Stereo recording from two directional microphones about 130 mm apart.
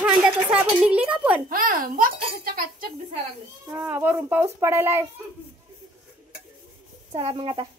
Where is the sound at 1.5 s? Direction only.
90° right.